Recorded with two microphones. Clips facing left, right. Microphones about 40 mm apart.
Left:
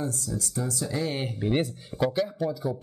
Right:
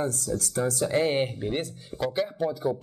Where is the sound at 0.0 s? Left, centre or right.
Right.